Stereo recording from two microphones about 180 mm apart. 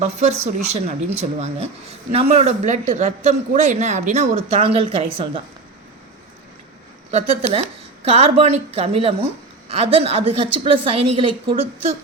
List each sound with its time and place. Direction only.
0.0 s speech: 40° right (ahead or behind)
7.1 s speech: 40° right (ahead or behind)